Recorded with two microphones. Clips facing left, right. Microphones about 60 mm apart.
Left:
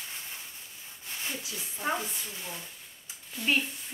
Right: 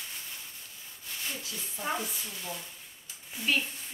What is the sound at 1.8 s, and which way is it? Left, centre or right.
Speech, left.